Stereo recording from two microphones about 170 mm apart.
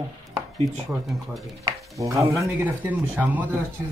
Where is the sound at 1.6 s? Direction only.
20° right (ahead or behind).